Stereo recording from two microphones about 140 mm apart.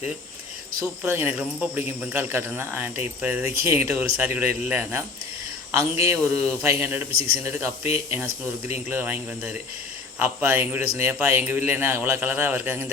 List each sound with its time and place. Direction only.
1.0 s speech: 15° right (ahead or behind)
10.2 s speech: 15° right (ahead or behind)